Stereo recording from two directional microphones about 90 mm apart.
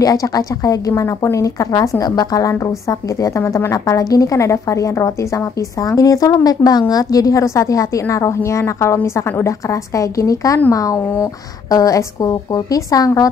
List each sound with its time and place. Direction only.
0.0 s a woman's voice: 40° left (ahead or behind)